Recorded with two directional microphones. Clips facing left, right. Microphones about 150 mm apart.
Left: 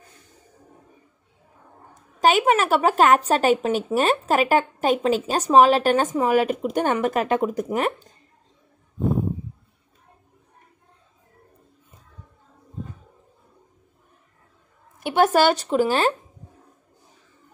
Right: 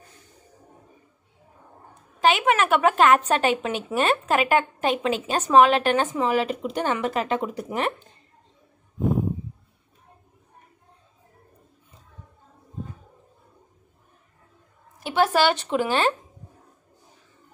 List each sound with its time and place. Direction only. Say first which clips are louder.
2.1 s speech: left 2 dB; 45° left (ahead or behind)
15.0 s speech: left 3 dB; 50° left (ahead or behind)